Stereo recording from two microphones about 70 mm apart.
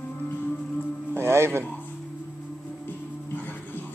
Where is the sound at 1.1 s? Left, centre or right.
Right.